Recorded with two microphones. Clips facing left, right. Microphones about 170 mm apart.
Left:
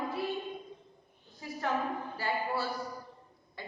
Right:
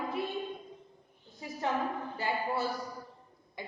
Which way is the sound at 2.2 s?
20° right (ahead or behind).